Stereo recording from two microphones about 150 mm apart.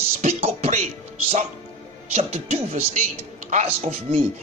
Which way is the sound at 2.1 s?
45° right (ahead or behind).